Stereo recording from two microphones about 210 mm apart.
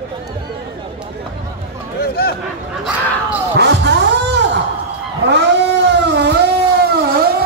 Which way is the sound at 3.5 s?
55° right (ahead or behind).